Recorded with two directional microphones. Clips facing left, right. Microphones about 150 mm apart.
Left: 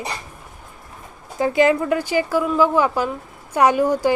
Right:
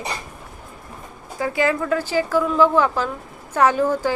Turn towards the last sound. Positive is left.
turn(degrees=15)  # may be behind; listen again after turning